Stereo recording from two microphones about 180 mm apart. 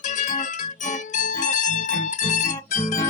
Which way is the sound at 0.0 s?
45° left (ahead or behind).